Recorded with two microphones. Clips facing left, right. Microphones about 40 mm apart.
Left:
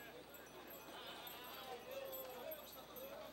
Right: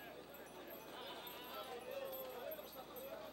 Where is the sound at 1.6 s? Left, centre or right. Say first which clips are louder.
Right 3 dB; right.